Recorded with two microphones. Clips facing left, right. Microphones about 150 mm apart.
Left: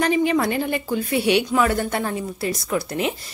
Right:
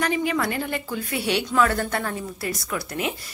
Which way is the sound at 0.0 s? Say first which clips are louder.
Left 5 dB; 25° left (ahead or behind).